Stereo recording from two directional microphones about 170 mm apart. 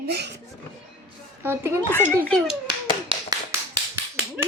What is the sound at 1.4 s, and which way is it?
Speech, 15° right (ahead or behind).